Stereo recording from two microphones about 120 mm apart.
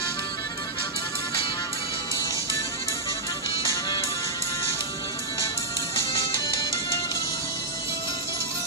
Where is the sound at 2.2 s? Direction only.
25° left (ahead or behind).